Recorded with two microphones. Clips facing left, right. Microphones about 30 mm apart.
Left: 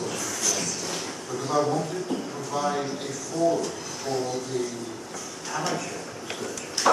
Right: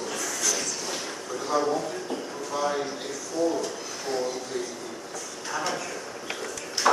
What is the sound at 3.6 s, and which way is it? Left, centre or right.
Speech, right.